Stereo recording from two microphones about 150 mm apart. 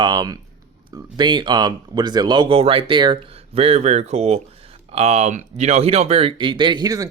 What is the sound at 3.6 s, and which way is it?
Speech, 45° right (ahead or behind).